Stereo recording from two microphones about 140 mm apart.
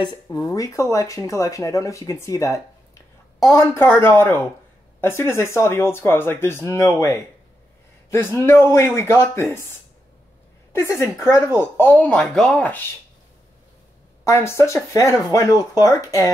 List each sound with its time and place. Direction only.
0.0 s speech: 30° left (ahead or behind)
10.7 s speech: 20° left (ahead or behind)
14.2 s speech: 20° left (ahead or behind)